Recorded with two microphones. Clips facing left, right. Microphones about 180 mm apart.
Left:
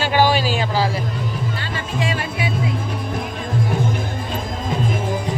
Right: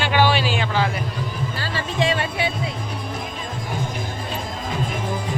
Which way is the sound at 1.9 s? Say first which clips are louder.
Right 2 dB; 35° right (ahead or behind).